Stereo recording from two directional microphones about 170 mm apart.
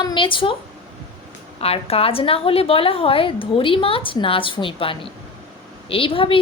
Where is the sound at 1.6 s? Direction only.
35° left (ahead or behind).